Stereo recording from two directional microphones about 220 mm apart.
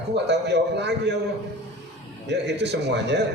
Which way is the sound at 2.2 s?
50° right (ahead or behind).